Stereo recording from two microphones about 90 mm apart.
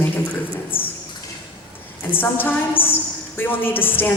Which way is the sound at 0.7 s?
85° left.